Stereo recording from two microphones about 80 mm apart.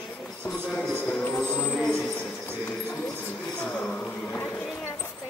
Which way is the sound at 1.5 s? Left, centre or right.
Centre.